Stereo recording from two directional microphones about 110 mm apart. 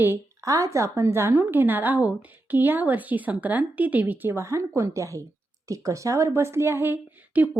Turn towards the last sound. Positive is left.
turn(degrees=-15)  # may be behind; listen again after turning